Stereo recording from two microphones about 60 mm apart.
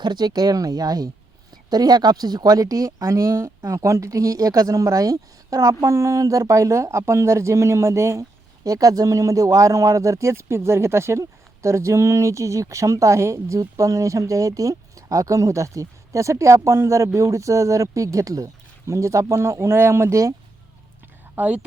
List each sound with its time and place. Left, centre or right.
0.4 s speech: right
3.1 s speech: right
5.8 s speech: right
13.6 s speech: right
21.4 s speech: right